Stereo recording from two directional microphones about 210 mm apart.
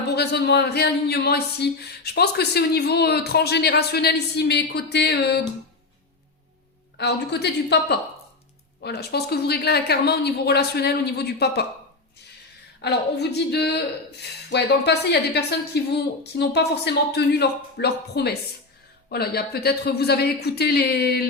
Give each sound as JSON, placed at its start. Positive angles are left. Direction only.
{"t": 0.1, "sound": "a woman's voice", "side_deg": 50}
{"t": 6.9, "sound": "a woman's voice", "side_deg": 55}
{"t": 12.8, "sound": "a woman's voice", "side_deg": 50}